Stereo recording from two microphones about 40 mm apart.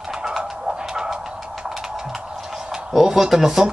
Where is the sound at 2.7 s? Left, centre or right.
Centre.